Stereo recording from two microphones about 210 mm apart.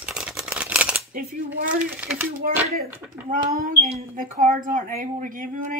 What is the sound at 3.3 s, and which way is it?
A child's voice, 45° right (ahead or behind).